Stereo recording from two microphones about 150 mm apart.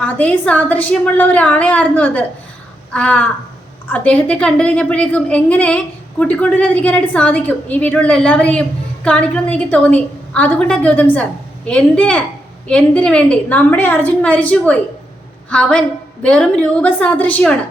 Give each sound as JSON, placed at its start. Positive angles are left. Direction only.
{"t": 0.0, "sound": "a woman's voice", "side_deg": 10}